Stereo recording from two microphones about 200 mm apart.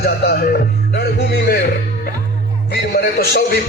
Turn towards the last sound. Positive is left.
turn(degrees=50)  # may be behind; listen again after turning